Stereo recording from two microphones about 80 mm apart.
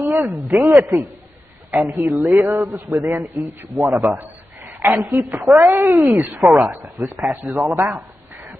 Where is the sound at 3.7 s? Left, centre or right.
Centre.